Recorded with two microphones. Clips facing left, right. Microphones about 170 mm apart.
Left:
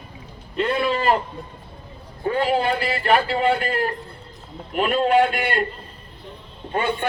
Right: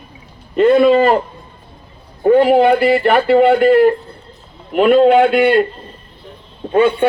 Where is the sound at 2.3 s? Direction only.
55° right (ahead or behind).